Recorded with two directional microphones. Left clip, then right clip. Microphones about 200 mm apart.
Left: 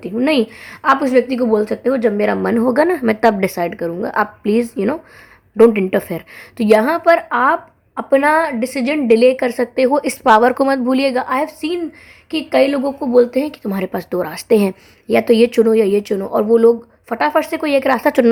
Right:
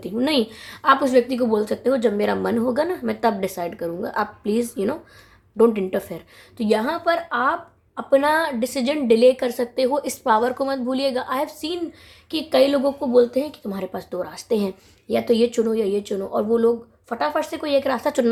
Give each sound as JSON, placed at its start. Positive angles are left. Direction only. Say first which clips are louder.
{"t": 0.0, "sound": "a woman's voice", "louder": "left 5 dB", "side_deg": 30}